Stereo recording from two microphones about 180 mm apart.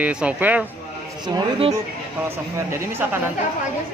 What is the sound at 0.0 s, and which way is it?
Speech, 5° right (ahead or behind).